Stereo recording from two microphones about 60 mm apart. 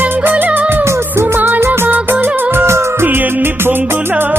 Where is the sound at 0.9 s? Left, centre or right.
Right.